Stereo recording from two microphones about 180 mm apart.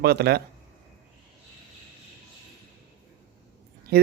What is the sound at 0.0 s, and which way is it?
Speech, 65° right (ahead or behind).